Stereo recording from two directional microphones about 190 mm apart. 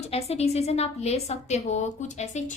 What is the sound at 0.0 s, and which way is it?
A woman's voice, 35° left (ahead or behind).